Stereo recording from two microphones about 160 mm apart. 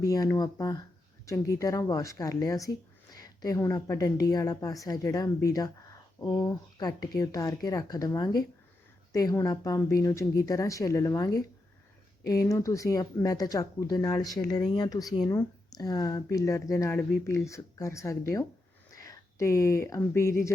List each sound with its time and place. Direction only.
0.0 s a woman's voice: 20° left (ahead or behind)